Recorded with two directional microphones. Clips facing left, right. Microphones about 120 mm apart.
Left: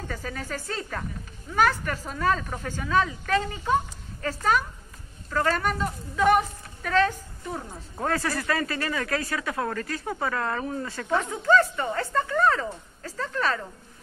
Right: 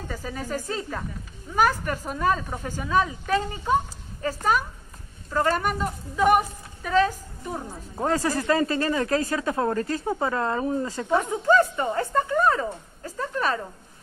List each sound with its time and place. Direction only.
0.1 s a woman's voice: 10° right (ahead or behind)